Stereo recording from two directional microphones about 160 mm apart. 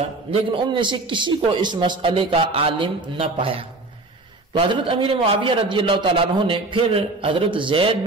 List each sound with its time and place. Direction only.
0.3 s a man's voice: 30° right (ahead or behind)